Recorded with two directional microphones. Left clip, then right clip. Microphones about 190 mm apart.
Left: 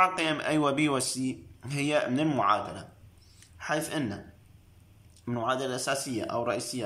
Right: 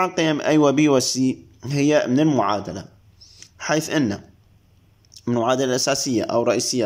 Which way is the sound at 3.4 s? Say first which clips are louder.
Right 9 dB; 40° right (ahead or behind).